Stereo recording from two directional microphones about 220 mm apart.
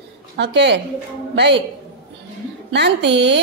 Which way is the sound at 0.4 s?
50° right (ahead or behind).